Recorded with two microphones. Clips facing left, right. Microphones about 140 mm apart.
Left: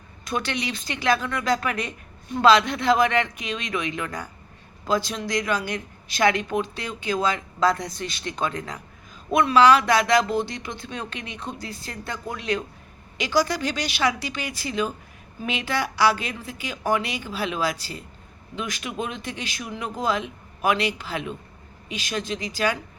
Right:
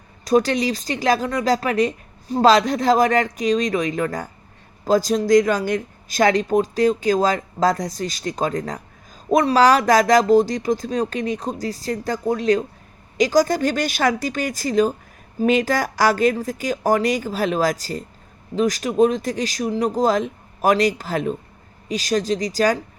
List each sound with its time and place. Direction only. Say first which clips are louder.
0.3 s speech: right 10 dB; 40° right (ahead or behind)